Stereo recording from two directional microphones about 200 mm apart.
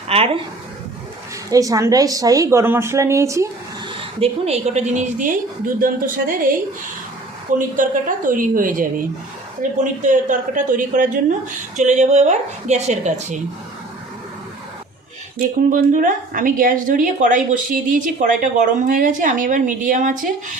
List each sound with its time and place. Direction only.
0.1 s a sound: 30° right (ahead or behind)
1.5 s speech: 15° right (ahead or behind)
4.2 s a woman's voice: 30° right (ahead or behind)
7.8 s a woman's voice: 40° right (ahead or behind)
15.4 s a woman's voice: 45° right (ahead or behind)